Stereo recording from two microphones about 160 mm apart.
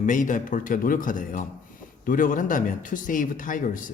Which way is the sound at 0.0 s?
55° left (ahead or behind).